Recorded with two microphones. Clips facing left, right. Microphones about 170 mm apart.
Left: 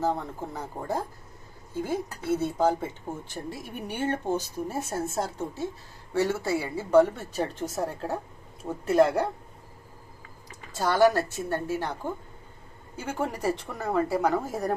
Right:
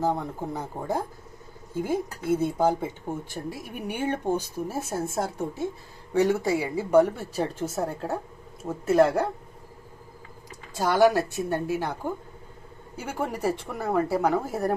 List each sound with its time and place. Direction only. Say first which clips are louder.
0.0 s speech: right 2 dB; 10° right (ahead or behind)
10.8 s speech: right 1 dB; 15° right (ahead or behind)